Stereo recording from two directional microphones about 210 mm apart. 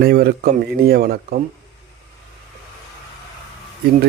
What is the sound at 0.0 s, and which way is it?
Speech, 45° right (ahead or behind).